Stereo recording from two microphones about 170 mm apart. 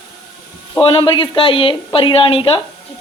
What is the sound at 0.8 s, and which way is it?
Speech, 30° left (ahead or behind).